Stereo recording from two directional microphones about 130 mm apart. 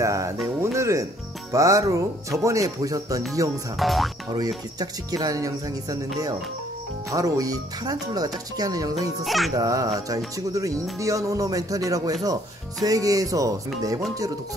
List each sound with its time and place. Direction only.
0.0 s speech: 25° right (ahead or behind)
1.5 s music: 25° right (ahead or behind)
3.7 s speech: centre (ahead or behind)
4.7 s music: 30° right (ahead or behind)
7.1 s music: 25° right (ahead or behind)
9.2 s speech: centre (ahead or behind)
9.6 s music: 30° right (ahead or behind)